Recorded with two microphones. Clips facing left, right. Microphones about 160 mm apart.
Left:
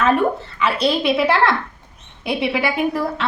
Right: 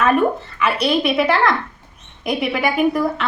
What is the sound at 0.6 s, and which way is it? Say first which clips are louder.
A woman's voice: even; 30° left (ahead or behind).